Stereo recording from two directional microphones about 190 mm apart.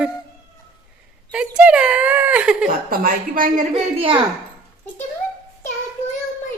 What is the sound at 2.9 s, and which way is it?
Speech, 45° right (ahead or behind).